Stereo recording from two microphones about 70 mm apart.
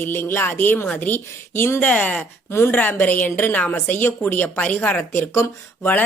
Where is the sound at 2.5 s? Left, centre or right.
Left.